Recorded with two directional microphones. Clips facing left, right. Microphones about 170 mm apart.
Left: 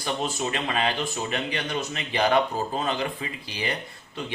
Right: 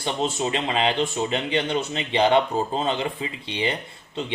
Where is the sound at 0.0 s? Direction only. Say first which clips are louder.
Right 3 dB; 25° right (ahead or behind).